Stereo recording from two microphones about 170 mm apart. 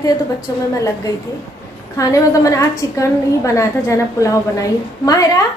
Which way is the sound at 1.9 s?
20° left (ahead or behind).